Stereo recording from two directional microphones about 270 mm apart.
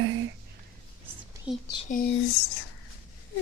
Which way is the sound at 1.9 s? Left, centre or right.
Left.